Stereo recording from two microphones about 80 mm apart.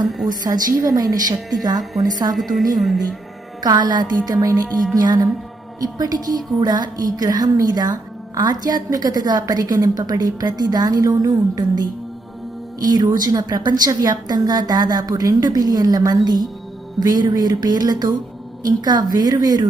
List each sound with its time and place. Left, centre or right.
0.5 s a woman's voice: right
2.3 s speech: centre
3.6 s a woman's voice: right